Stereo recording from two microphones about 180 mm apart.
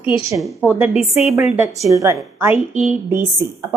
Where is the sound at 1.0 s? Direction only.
35° left (ahead or behind).